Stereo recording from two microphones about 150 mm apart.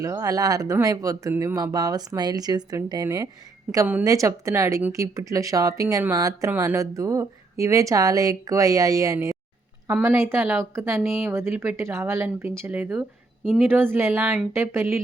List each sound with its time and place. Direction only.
0.0 s speech: 20° right (ahead or behind)
10.9 s speech: centre (ahead or behind)
11.3 s speech: 15° right (ahead or behind)
13.4 s speech: centre (ahead or behind)
13.7 s speech: 15° right (ahead or behind)